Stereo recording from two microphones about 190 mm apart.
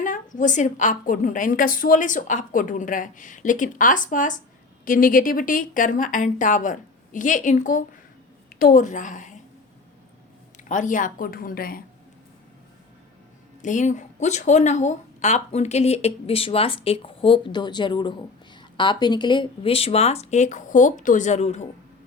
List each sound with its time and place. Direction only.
0.0 s a woman's voice: 45° left (ahead or behind)
10.6 s a woman's voice: 40° left (ahead or behind)
13.6 s speech: 40° left (ahead or behind)